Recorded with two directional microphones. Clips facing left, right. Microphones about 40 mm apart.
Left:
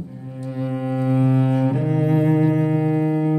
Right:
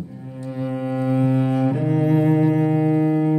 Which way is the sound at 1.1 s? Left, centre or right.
Left.